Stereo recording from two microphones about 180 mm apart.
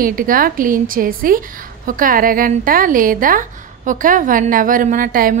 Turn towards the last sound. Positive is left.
turn(degrees=-50)  # may be behind; listen again after turning